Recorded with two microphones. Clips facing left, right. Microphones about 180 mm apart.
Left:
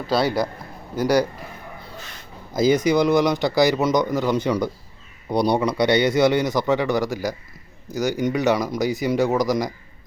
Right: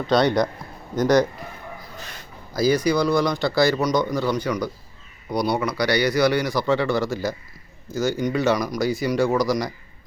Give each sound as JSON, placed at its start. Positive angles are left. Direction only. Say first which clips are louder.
{"t": 0.1, "sound": "a man's voice", "louder": "right 2 dB", "side_deg": 5}
{"t": 2.5, "sound": "a man's voice", "louder": "left 2 dB", "side_deg": 20}